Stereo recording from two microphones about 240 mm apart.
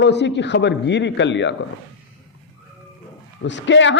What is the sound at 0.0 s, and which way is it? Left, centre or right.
A man's voice, left.